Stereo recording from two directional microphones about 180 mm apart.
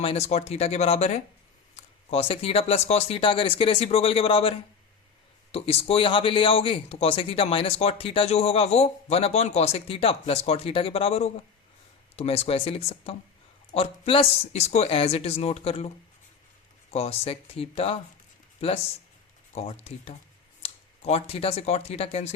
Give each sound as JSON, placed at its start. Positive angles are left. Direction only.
{"t": 0.0, "sound": "a man's voice", "side_deg": 35}
{"t": 16.9, "sound": "a man's voice", "side_deg": 35}